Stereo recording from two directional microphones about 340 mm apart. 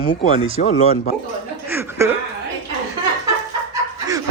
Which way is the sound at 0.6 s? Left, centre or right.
Centre.